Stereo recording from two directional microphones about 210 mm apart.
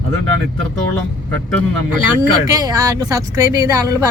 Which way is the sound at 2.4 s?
15° right (ahead or behind).